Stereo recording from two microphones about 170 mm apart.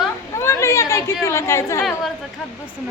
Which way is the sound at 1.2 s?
15° left (ahead or behind).